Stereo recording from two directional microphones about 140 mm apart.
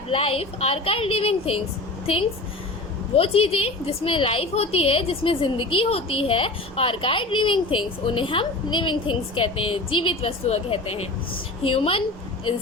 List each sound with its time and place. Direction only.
0.1 s a woman's voice: 40° left (ahead or behind)
3.2 s a woman's voice: 40° left (ahead or behind)